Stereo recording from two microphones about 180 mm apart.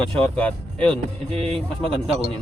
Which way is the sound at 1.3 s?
35° right (ahead or behind).